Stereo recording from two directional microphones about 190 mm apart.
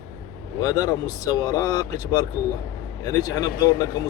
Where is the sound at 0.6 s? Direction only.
20° left (ahead or behind).